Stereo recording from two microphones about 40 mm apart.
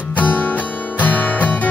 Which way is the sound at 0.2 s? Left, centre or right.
Left.